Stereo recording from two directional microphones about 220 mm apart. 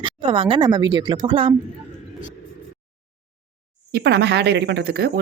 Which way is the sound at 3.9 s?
45° right (ahead or behind).